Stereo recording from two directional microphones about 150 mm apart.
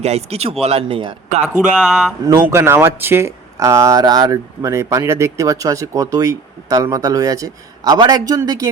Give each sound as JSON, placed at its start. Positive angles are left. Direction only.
{"t": 0.0, "sound": "speech", "side_deg": -45}
{"t": 1.7, "sound": "speech", "side_deg": -5}
{"t": 2.2, "sound": "speech", "side_deg": -20}